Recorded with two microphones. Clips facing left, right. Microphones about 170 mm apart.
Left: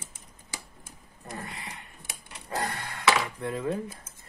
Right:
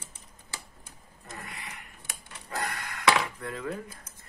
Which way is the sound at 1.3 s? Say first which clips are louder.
Left 4 dB; 30° left (ahead or behind).